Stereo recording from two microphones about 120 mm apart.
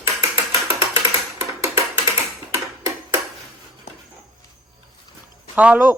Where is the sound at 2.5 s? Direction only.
20° right (ahead or behind).